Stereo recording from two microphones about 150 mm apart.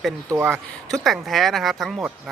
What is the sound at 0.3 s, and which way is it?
Speech, 15° right (ahead or behind).